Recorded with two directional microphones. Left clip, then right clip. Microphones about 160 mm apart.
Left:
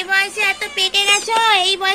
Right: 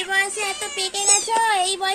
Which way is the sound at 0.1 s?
15° right (ahead or behind).